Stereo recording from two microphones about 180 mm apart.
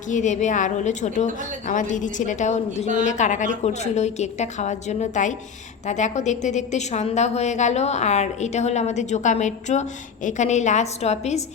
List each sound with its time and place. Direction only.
0.1 s a woman's voice: 45° left (ahead or behind)